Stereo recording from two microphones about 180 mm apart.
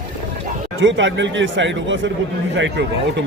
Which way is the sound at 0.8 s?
90° right.